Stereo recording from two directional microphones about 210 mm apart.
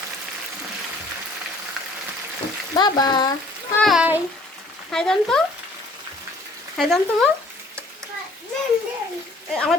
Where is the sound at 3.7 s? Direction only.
Centre (ahead or behind).